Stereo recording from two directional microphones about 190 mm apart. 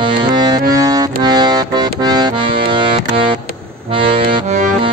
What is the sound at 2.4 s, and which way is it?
Accordion, 55° right (ahead or behind).